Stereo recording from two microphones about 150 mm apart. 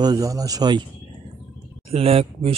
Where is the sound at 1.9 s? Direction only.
40° right (ahead or behind).